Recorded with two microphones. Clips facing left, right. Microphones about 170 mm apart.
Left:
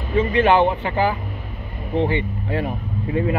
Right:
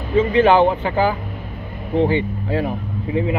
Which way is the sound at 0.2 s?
30° right (ahead or behind).